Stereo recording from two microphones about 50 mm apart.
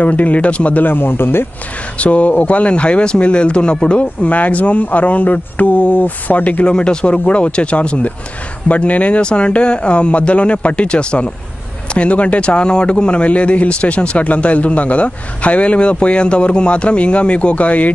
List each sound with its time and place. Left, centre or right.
0.0 s a man's voice: left
0.8 s speech: left
2.0 s a man's voice: left
6.6 s a man's voice: centre